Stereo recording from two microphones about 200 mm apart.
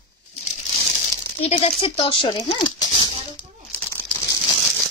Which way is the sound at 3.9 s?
15° left (ahead or behind).